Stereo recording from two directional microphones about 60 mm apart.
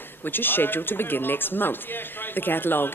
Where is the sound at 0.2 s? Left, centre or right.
Left.